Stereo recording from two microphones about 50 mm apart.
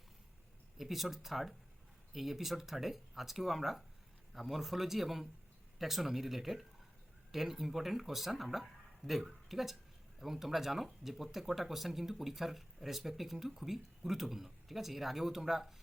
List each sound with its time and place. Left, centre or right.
0.8 s speech: centre